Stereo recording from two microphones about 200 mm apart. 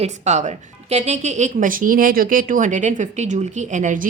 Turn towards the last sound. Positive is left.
turn(degrees=-40)  # may be behind; listen again after turning